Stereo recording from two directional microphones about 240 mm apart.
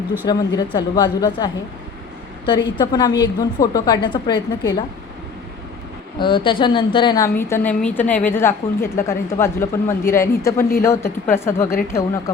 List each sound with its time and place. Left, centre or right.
0.3 s a woman's voice: centre
2.5 s a woman's voice: centre
6.1 s a woman's voice: left